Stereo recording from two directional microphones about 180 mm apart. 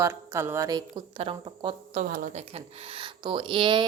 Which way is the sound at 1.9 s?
50° right (ahead or behind).